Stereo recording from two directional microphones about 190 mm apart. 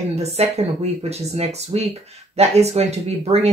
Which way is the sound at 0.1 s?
35° right (ahead or behind).